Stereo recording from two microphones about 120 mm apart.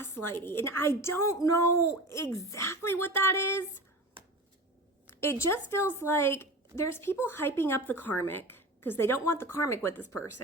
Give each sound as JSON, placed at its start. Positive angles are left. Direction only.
{"t": 0.0, "sound": "a woman's voice", "side_deg": 20}
{"t": 5.2, "sound": "a woman's voice", "side_deg": 20}